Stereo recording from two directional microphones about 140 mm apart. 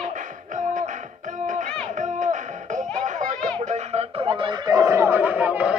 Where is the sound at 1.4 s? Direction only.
65° right (ahead or behind).